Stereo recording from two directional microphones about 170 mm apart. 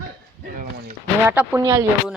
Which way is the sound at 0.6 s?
65° right (ahead or behind).